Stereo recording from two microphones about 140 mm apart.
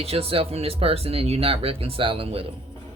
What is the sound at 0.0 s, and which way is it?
Speech, 45° right (ahead or behind).